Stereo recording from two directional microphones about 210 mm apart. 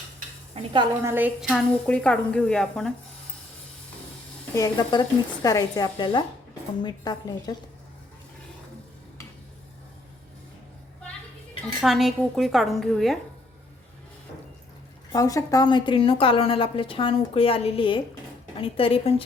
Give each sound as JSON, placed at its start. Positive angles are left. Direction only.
{"t": 0.5, "sound": "a woman's voice", "side_deg": -25}
{"t": 1.0, "sound": "a woman's voice", "side_deg": -10}
{"t": 4.5, "sound": "speech", "side_deg": 15}
{"t": 11.8, "sound": "a woman's voice", "side_deg": 0}
{"t": 15.1, "sound": "speech", "side_deg": 15}